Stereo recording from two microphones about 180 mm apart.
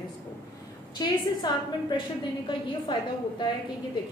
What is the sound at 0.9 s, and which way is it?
A woman's voice, 25° left (ahead or behind).